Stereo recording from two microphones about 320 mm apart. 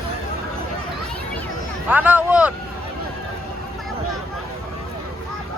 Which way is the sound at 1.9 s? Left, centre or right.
Centre.